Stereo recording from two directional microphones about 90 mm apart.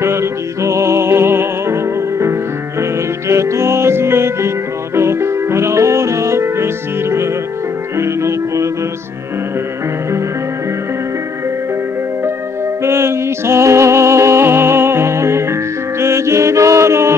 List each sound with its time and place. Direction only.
0.0 s music: 30° right (ahead or behind)
12.8 s music: 30° right (ahead or behind)